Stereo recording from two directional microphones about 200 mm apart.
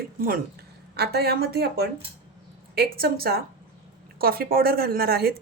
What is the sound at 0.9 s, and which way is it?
A woman's voice, 55° right (ahead or behind).